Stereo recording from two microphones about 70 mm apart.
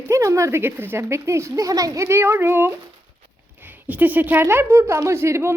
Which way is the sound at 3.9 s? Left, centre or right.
Right.